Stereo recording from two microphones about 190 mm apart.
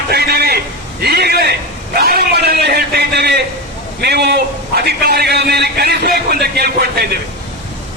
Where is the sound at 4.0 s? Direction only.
60° right (ahead or behind).